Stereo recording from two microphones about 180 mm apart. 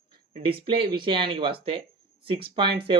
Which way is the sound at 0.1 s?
30° right (ahead or behind).